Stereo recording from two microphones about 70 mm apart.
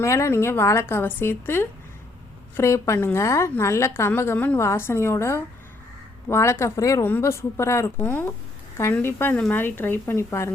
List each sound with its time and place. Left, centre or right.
0.0 s a woman's voice: left
2.6 s a woman's voice: left
4.4 s a woman's voice: left
4.6 s a woman's voice: left
8.0 s a woman's voice: left
9.3 s a woman's voice: centre
9.6 s a woman's voice: left